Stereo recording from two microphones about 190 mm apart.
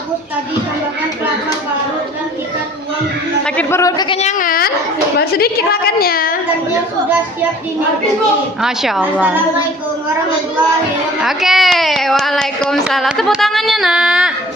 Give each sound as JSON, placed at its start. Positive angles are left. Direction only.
{"t": 3.4, "sound": "speech", "side_deg": 10}
{"t": 4.2, "sound": "a woman's voice", "side_deg": 40}
{"t": 8.6, "sound": "speech", "side_deg": 0}
{"t": 11.2, "sound": "speech", "side_deg": 0}